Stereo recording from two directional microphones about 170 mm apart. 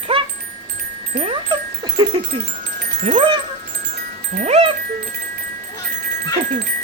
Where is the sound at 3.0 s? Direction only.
35° right (ahead or behind).